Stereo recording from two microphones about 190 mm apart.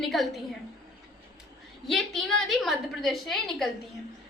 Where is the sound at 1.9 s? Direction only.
Centre (ahead or behind).